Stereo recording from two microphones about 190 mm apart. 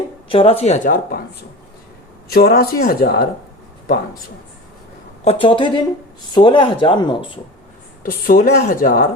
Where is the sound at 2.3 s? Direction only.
50° left (ahead or behind).